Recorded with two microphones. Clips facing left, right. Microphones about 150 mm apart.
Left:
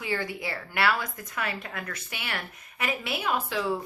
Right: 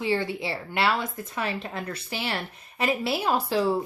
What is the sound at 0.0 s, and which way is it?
Speech, 25° right (ahead or behind).